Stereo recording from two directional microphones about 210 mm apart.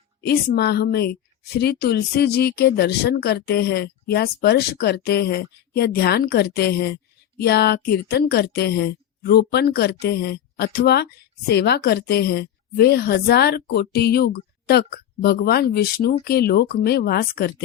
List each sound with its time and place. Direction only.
0.2 s a woman's voice: 50° left (ahead or behind)